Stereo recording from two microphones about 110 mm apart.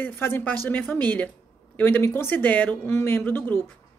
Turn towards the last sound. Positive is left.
turn(degrees=20)  # may be behind; listen again after turning